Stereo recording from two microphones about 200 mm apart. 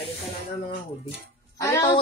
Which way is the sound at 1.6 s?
15° left (ahead or behind).